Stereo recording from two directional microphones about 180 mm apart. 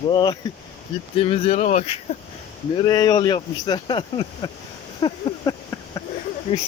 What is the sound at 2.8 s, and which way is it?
Speech, 20° left (ahead or behind).